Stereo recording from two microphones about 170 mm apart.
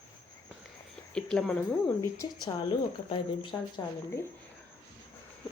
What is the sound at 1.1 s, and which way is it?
Speech, 5° left (ahead or behind).